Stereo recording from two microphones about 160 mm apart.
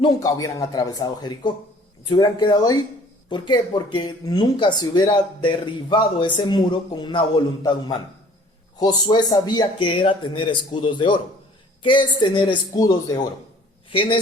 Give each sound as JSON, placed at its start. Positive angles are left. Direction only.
{"t": 0.0, "sound": "speech", "side_deg": 25}